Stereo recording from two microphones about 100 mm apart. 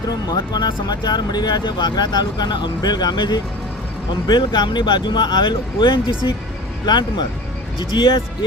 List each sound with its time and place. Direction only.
0.3 s speech: 45° left (ahead or behind)